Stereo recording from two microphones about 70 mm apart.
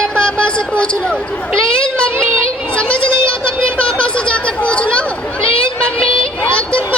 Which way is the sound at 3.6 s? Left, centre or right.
Centre.